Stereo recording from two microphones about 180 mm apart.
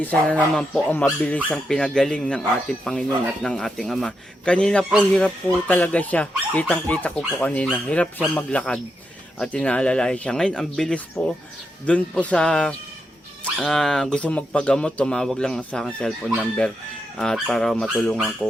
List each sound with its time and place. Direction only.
0.0 s speech: 10° left (ahead or behind)